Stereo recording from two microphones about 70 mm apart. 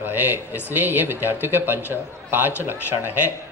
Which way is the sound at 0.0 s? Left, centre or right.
Right.